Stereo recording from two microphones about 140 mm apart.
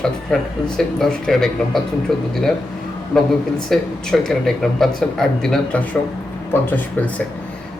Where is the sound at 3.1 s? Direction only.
Centre (ahead or behind).